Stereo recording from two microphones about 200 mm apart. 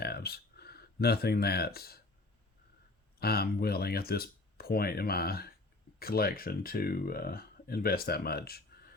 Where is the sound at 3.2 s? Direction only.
50° left (ahead or behind).